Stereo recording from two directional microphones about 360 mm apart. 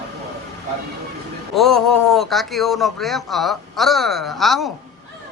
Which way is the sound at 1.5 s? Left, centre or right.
Centre.